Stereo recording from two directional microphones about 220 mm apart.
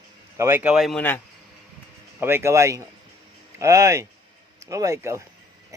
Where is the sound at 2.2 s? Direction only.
10° right (ahead or behind).